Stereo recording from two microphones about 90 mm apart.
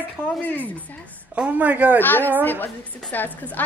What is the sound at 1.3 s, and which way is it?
Speech, 15° right (ahead or behind).